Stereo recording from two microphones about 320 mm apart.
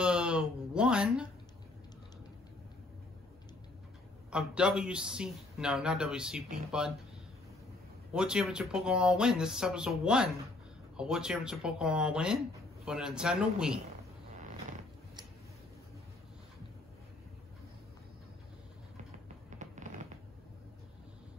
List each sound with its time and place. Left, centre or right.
0.0 s a man's voice: centre
4.3 s a man's voice: centre
8.1 s a man's voice: centre
14.3 s creak: right
19.2 s music: right